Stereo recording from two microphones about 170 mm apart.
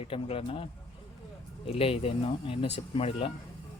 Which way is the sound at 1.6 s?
35° left (ahead or behind).